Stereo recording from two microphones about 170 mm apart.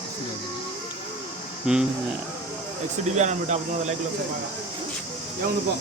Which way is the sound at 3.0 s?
45° right (ahead or behind).